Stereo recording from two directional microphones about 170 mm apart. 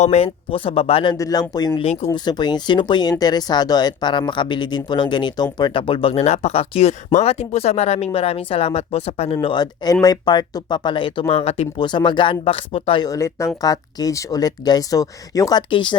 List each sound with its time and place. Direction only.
0.0 s speech: 40° left (ahead or behind)
1.1 s speech: 20° left (ahead or behind)